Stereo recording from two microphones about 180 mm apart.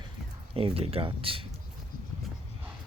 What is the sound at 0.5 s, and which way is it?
Speech, 30° right (ahead or behind).